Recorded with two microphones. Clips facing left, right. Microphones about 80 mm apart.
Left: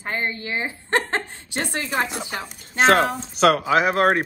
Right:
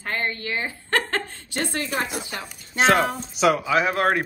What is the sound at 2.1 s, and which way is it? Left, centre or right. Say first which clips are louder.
Speech: left 2 dB; left.